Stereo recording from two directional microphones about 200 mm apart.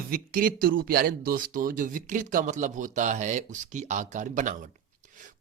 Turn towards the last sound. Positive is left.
turn(degrees=-40)  # may be behind; listen again after turning